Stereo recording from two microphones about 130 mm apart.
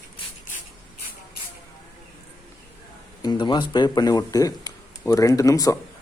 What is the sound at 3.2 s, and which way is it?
Speech, 35° left (ahead or behind).